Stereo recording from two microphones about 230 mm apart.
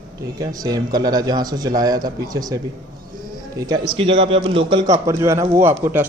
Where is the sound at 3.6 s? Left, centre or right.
Centre.